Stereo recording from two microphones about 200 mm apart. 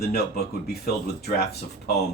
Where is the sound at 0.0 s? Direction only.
50° left (ahead or behind).